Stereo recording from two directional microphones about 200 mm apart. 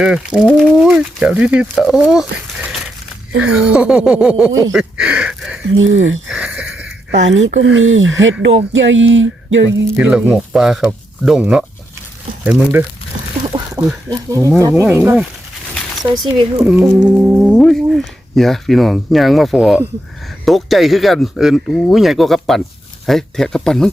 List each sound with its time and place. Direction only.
0.0 s speech: 5° right (ahead or behind)
5.6 s speech: 70° right (ahead or behind)
6.2 s a sound: 5° right (ahead or behind)
7.3 s speech: 70° right (ahead or behind)
10.0 s speech: 5° right (ahead or behind)
13.4 s a sound: 25° right (ahead or behind)
13.8 s speech: 15° right (ahead or behind)
16.6 s speech: 15° right (ahead or behind)